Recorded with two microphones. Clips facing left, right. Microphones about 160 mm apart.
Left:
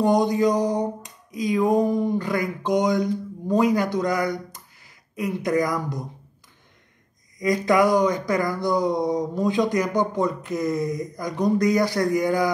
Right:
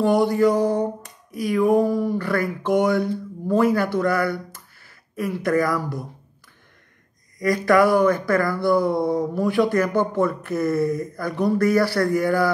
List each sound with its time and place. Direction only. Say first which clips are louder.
0.0 s speech: right 2 dB; 20° left (ahead or behind)
7.3 s speech: right 2 dB; 20° left (ahead or behind)